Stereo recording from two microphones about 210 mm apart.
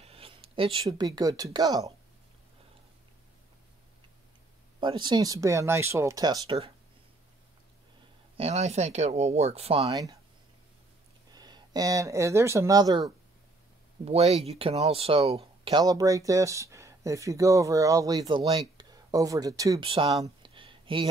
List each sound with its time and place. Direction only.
0.0 s speech: 25° right (ahead or behind)
4.7 s speech: 20° right (ahead or behind)
8.4 s speech: 30° right (ahead or behind)
11.3 s speech: 20° right (ahead or behind)
14.0 s speech: 30° right (ahead or behind)